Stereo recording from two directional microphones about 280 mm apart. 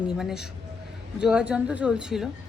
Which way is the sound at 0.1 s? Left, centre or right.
Centre.